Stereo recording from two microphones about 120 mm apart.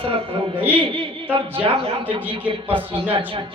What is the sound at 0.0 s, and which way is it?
Speech, 50° right (ahead or behind).